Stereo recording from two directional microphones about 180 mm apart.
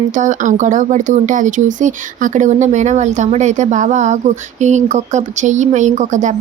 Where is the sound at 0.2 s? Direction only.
45° right (ahead or behind).